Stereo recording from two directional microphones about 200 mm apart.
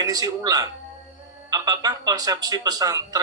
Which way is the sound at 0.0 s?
20° right (ahead or behind).